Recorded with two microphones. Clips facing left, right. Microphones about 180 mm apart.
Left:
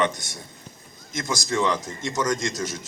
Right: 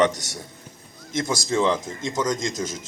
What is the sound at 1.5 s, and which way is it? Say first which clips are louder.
Speech: right 2 dB; 25° right (ahead or behind).